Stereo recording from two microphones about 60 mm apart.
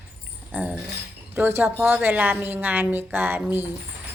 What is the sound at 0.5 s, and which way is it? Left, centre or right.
Speech, right.